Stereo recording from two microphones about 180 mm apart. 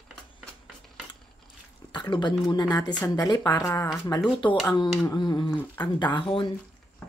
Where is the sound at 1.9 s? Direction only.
25° left (ahead or behind).